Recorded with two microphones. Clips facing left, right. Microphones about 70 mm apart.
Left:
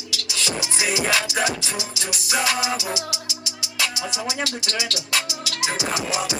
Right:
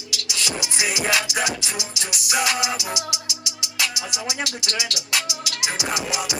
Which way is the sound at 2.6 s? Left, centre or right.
Left.